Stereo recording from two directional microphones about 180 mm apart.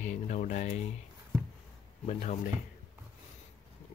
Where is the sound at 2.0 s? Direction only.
40° left (ahead or behind).